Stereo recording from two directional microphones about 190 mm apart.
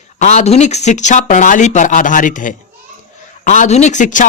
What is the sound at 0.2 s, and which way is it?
Speech, 35° left (ahead or behind).